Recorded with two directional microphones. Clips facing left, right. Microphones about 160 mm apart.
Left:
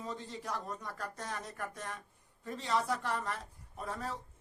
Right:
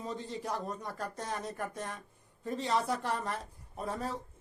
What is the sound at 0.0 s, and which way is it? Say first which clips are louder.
Speech: right 3 dB; 30° right (ahead or behind).